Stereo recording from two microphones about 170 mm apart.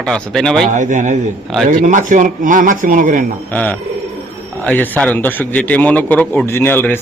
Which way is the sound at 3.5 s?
10° left (ahead or behind).